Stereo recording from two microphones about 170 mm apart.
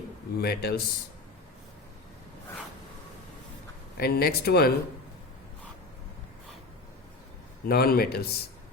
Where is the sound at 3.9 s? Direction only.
65° left (ahead or behind).